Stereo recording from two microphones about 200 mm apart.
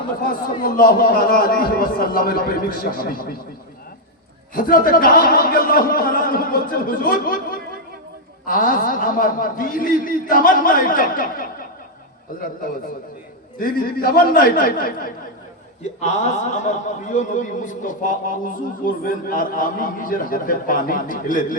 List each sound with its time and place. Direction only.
0.2 s a man's voice: 45° left (ahead or behind)
4.5 s a man's voice: 45° left (ahead or behind)
13.6 s a man's voice: 45° left (ahead or behind)